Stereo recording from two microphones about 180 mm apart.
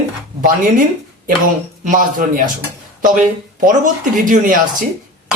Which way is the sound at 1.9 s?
50° right (ahead or behind).